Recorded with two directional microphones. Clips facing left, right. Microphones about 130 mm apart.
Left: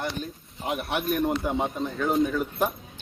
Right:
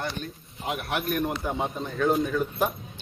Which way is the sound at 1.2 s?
25° left (ahead or behind).